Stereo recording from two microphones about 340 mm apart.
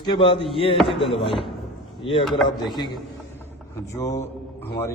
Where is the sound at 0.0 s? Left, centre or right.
Centre.